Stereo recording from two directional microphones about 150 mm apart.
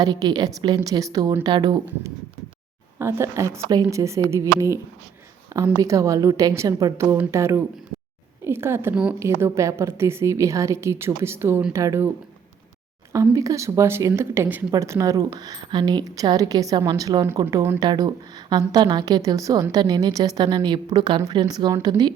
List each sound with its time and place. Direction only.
0.0 s speech: 25° right (ahead or behind)
3.0 s speech: 15° right (ahead or behind)
5.7 s a woman's voice: 20° right (ahead or behind)
13.3 s speech: 20° right (ahead or behind)